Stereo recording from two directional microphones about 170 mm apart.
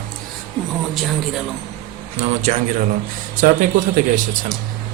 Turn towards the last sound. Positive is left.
turn(degrees=-50)  # may be behind; listen again after turning